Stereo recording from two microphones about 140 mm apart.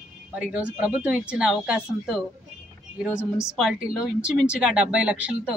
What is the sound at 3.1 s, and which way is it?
Speech, 20° left (ahead or behind).